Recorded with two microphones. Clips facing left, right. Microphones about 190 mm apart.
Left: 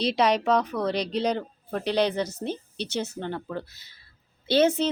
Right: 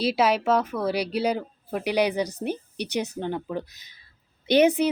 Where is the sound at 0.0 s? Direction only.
5° right (ahead or behind).